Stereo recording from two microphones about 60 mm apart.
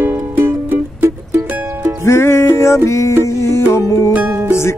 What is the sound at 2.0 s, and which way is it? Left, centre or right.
Music, left.